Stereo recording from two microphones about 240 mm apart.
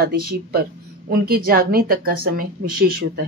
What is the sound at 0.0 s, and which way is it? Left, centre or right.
A woman's voice, right.